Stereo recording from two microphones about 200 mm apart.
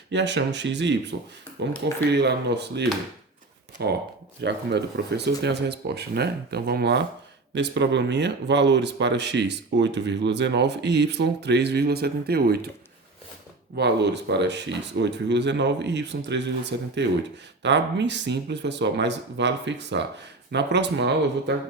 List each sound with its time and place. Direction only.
0.1 s speech: 60° right (ahead or behind)
13.7 s speech: 60° right (ahead or behind)